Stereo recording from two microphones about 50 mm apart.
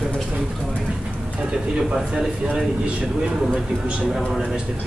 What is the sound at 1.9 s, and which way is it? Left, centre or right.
Speech, centre.